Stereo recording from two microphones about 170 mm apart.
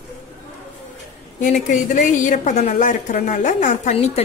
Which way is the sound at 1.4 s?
50° left (ahead or behind).